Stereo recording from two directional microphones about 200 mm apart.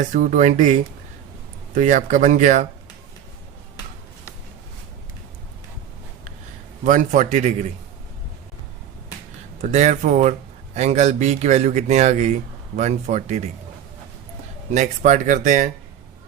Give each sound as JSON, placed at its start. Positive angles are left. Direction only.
{"t": 0.0, "sound": "speech", "side_deg": -40}
{"t": 6.8, "sound": "speech", "side_deg": -40}
{"t": 9.6, "sound": "speech", "side_deg": -35}
{"t": 14.7, "sound": "speech", "side_deg": -35}